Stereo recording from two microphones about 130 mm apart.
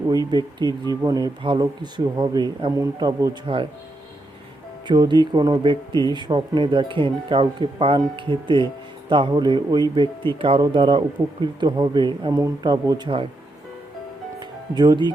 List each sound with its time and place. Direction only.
0.1 s speech: 35° right (ahead or behind)
3.4 s speech: 40° right (ahead or behind)
4.9 s speech: 35° right (ahead or behind)
14.3 s music: 35° right (ahead or behind)